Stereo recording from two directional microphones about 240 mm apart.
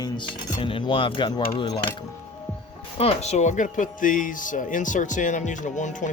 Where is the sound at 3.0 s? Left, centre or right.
Left.